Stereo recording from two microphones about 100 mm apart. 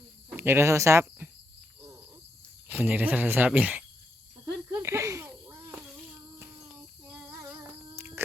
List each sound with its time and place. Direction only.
0.3 s speech: 25° right (ahead or behind)
2.6 s speech: 15° right (ahead or behind)
4.7 s snake: 30° right (ahead or behind)
7.3 s child singing: 25° right (ahead or behind)
7.9 s a sound: 25° right (ahead or behind)